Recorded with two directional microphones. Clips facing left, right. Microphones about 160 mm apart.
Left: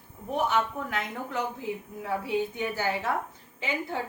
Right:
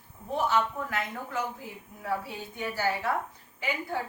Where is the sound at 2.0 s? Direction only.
20° left (ahead or behind).